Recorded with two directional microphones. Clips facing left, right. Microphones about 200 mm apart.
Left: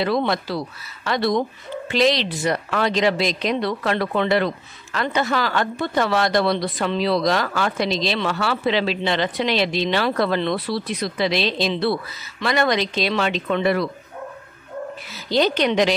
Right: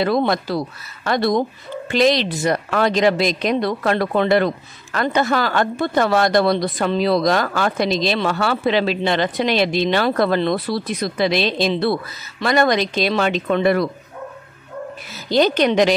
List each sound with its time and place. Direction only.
0.0 s a woman's voice: 45° right (ahead or behind)
15.2 s a woman's voice: 45° right (ahead or behind)